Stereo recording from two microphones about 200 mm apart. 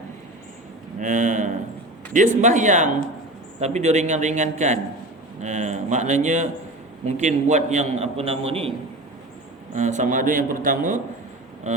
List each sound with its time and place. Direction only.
0.9 s a man's voice: 40° right (ahead or behind)
9.7 s a man's voice: 35° right (ahead or behind)